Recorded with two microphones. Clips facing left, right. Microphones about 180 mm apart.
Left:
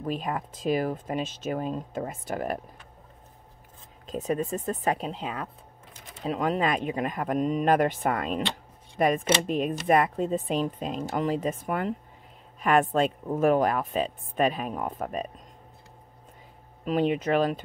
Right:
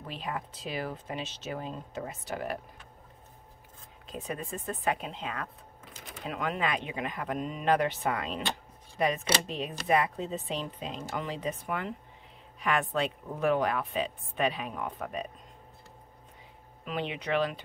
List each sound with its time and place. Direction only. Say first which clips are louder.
0.0 s speech: left 7 dB; 45° left (ahead or behind)
4.1 s speech: left 9 dB; 40° left (ahead or behind)
16.8 s speech: left 10 dB; 45° left (ahead or behind)